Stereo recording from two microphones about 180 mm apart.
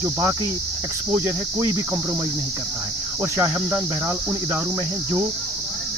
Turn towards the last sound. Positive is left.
turn(degrees=-15)  # may be behind; listen again after turning